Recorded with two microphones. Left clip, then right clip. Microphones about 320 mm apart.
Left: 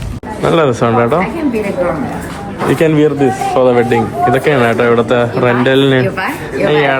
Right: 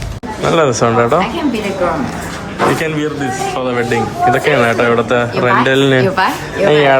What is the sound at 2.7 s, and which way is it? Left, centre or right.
A man's voice, centre.